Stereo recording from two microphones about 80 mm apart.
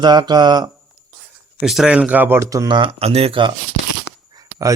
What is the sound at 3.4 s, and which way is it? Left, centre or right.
Speech, right.